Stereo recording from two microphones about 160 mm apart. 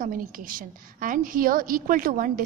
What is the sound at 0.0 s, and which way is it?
A woman's voice, 60° right (ahead or behind).